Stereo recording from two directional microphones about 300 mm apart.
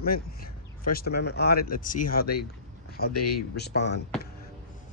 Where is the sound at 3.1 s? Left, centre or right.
Left.